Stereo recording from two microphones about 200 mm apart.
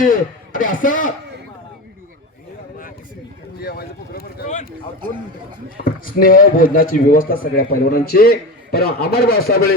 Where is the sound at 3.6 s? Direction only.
50° left (ahead or behind).